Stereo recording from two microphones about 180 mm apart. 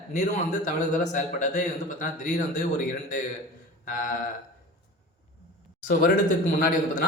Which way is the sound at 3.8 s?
50° left (ahead or behind).